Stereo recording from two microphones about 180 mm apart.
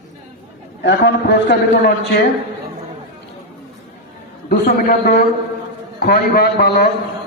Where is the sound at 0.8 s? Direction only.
90° left.